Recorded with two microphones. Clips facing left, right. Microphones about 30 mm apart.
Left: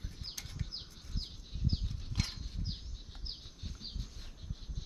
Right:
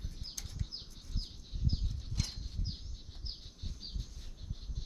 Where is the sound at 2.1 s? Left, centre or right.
Left.